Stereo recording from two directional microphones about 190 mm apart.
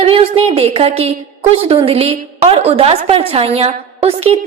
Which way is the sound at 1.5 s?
30° right (ahead or behind).